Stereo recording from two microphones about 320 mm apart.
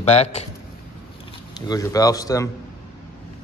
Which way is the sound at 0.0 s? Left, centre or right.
Centre.